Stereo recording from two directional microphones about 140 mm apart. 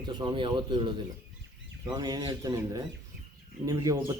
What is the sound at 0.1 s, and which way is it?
Speech, 35° right (ahead or behind).